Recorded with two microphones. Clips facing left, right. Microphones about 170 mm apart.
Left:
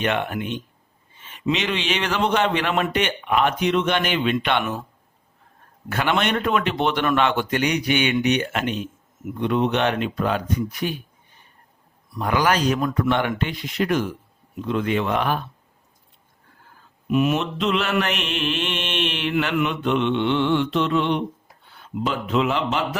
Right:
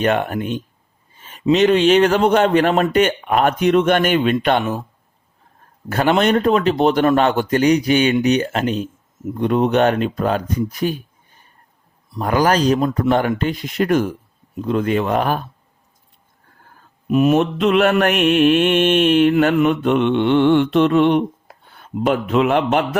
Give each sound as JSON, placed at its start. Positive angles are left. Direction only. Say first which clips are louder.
{"t": 0.0, "sound": "a man's voice", "louder": "right 5 dB", "side_deg": -40}
{"t": 1.1, "sound": "mantra", "louder": "right 8 dB", "side_deg": -40}
{"t": 4.6, "sound": "speech", "louder": "right 5 dB", "side_deg": -25}
{"t": 5.9, "sound": "a man's voice", "louder": "right 7 dB", "side_deg": -40}
{"t": 12.2, "sound": "a man's voice", "louder": "right 4 dB", "side_deg": -40}
{"t": 13.4, "sound": "mantra", "louder": "right 5 dB", "side_deg": -45}
{"t": 14.6, "sound": "a man's voice", "louder": "right 4 dB", "side_deg": -40}
{"t": 17.1, "sound": "mantra", "louder": "right 6 dB", "side_deg": -40}
{"t": 21.8, "sound": "a man's voice", "louder": "right 7 dB", "side_deg": -55}